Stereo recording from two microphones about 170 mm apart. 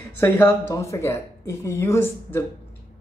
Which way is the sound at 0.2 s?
10° left (ahead or behind).